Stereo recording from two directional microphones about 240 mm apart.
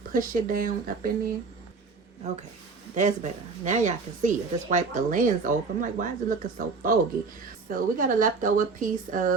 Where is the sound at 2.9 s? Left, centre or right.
Right.